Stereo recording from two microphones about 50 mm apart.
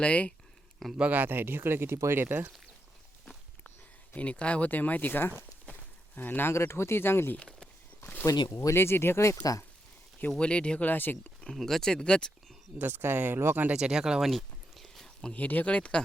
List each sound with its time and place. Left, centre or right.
0.0 s speech: left
1.1 s speech: right
4.1 s speech: left
4.7 s speech: left
6.5 s speech: left
8.2 s speech: left
8.7 s speech: left
10.2 s speech: centre
10.8 s speech: left
11.5 s speech: centre
12.8 s speech: right
13.7 s speech: centre
14.3 s a sound: centre
15.4 s speech: left